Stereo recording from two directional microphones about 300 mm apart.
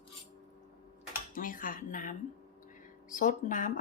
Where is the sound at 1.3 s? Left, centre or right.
Left.